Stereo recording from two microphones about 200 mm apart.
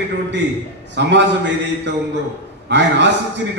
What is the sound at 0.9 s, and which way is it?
Speech, 60° right (ahead or behind).